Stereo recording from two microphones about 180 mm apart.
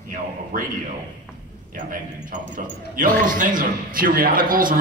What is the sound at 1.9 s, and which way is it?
Speech, 50° right (ahead or behind).